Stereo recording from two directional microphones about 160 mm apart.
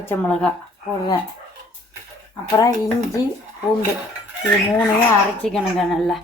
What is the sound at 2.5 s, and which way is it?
Speech, 20° left (ahead or behind).